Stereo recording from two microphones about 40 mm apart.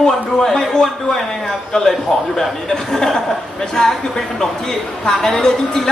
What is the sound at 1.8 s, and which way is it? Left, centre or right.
Speech, centre.